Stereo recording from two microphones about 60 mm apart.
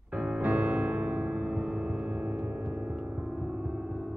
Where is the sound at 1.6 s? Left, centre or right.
Centre.